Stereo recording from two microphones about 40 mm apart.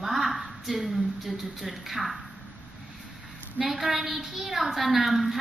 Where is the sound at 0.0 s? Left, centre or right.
Centre.